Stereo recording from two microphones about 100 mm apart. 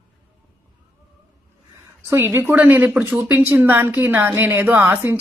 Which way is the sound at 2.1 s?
25° right (ahead or behind).